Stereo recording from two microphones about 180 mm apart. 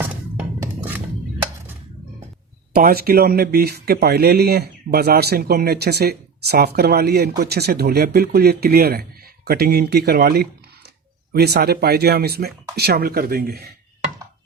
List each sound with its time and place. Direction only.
2.7 s speech: 55° right (ahead or behind)